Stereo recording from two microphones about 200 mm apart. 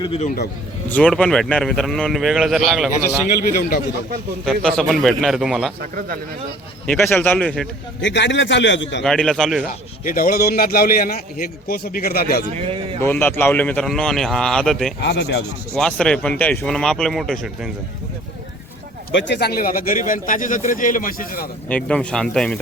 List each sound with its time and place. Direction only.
0.0 s a man's voice: 25° left (ahead or behind)
0.9 s a man's voice: 5° left (ahead or behind)
4.4 s a man's voice: centre (ahead or behind)
6.8 s a man's voice: 10° left (ahead or behind)
8.0 s a man's voice: 65° left (ahead or behind)
9.0 s a man's voice: 5° left (ahead or behind)
10.0 s a man's voice: 45° left (ahead or behind)
12.6 s speech: 25° right (ahead or behind)
13.0 s a man's voice: 10° left (ahead or behind)
15.0 s a man's voice: 55° left (ahead or behind)
15.7 s a man's voice: 5° left (ahead or behind)
19.1 s a man's voice: 60° left (ahead or behind)
21.7 s a man's voice: 5° left (ahead or behind)